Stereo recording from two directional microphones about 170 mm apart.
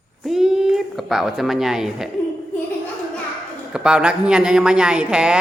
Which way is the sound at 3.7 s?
5° right (ahead or behind).